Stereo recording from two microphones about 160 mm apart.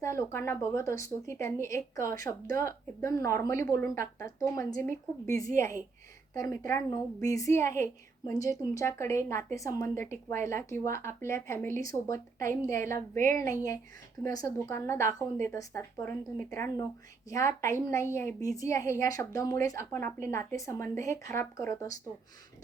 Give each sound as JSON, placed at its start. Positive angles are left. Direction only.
{"t": 0.0, "sound": "a woman's voice", "side_deg": 15}